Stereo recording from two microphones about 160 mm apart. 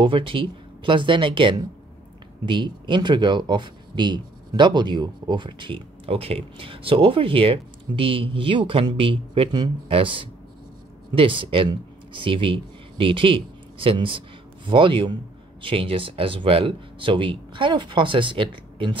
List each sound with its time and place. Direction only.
0.0 s speech: 30° right (ahead or behind)